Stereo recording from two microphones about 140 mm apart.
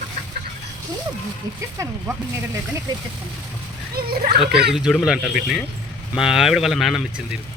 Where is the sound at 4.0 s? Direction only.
90° right.